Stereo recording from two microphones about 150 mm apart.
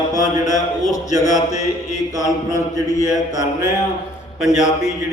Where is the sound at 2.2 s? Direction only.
20° left (ahead or behind).